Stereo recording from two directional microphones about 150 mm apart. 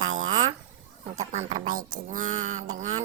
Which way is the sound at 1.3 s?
50° right (ahead or behind).